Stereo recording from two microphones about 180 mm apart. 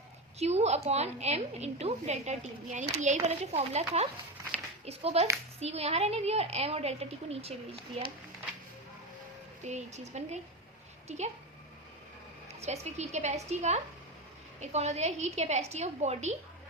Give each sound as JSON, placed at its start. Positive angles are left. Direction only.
{"t": 0.3, "sound": "a woman's voice", "side_deg": -35}
{"t": 9.6, "sound": "a woman's voice", "side_deg": -40}
{"t": 12.5, "sound": "a woman's voice", "side_deg": -35}